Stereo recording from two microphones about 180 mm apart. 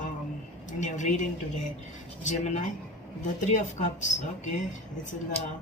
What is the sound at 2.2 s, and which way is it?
Speech, 40° left (ahead or behind).